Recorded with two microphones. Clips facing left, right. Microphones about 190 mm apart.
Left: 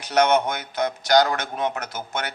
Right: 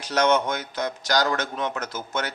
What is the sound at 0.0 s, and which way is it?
Speech, 60° left (ahead or behind).